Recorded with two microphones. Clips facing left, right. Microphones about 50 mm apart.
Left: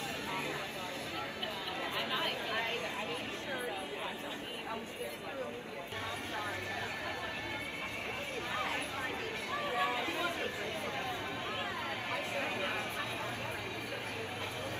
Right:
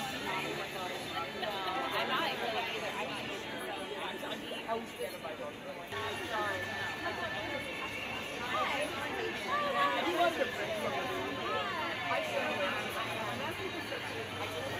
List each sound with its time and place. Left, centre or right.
1.4 s chatter: right
8.5 s a sound: right
12.1 s speech: right